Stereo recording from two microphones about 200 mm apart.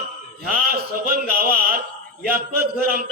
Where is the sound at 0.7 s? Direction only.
50° right (ahead or behind).